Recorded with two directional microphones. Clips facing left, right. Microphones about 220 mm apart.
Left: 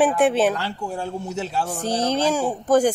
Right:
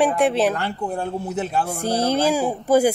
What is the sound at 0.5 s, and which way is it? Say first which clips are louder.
Speech: right 3 dB; 55° right (ahead or behind).